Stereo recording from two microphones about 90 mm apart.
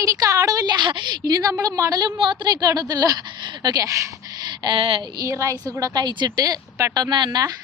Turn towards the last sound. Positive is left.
turn(degrees=-50)  # may be behind; listen again after turning